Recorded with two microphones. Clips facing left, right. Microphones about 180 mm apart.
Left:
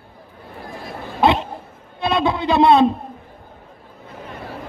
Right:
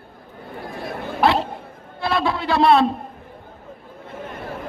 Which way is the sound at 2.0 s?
20° left (ahead or behind).